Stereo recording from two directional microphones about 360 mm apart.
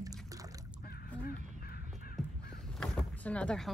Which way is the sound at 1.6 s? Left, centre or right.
Left.